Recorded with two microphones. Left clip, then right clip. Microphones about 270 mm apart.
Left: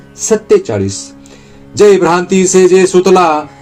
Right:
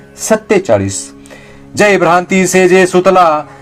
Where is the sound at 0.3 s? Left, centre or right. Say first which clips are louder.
Even; right.